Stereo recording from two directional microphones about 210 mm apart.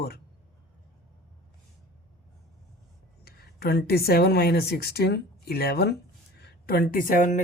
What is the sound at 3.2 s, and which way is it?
A woman's voice, 45° left (ahead or behind).